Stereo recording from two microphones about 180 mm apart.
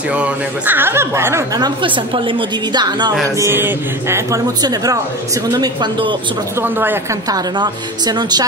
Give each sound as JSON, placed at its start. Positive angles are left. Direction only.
{"t": 0.1, "sound": "a man's voice", "side_deg": -10}
{"t": 1.8, "sound": "a woman's voice", "side_deg": -30}
{"t": 3.3, "sound": "a man's voice", "side_deg": -15}
{"t": 6.6, "sound": "a man's voice", "side_deg": -10}
{"t": 7.5, "sound": "a woman's voice", "side_deg": -25}